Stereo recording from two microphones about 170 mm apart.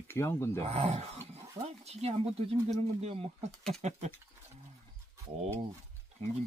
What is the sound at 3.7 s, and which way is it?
Patter, 40° right (ahead or behind).